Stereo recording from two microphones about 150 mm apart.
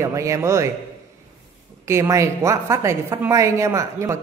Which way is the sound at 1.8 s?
20° right (ahead or behind).